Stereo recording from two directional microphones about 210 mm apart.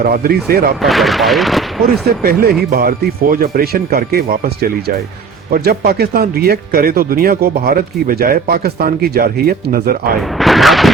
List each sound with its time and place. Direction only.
0.0 s speech: 45° right (ahead or behind)
0.8 s speech: centre (ahead or behind)
2.0 s speech: 45° right (ahead or behind)
10.2 s speech: centre (ahead or behind)